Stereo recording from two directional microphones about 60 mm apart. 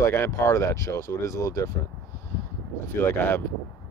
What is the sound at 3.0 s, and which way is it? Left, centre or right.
Speech, left.